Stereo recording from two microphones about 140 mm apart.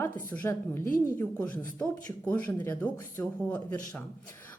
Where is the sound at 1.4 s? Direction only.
10° left (ahead or behind).